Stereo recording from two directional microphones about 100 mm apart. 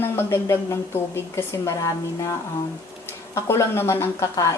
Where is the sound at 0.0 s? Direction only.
25° left (ahead or behind).